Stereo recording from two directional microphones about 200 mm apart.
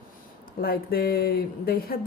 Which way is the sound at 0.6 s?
50° left (ahead or behind).